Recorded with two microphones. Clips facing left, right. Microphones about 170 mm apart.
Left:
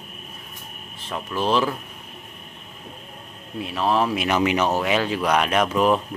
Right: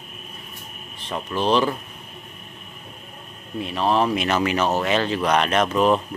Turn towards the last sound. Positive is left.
turn(degrees=5)  # may be behind; listen again after turning